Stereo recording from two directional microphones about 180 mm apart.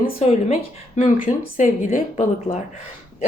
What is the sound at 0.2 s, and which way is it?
Speech, 35° left (ahead or behind).